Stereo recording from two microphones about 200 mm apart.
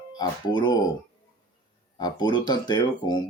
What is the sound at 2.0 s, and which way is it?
Speech, 20° left (ahead or behind).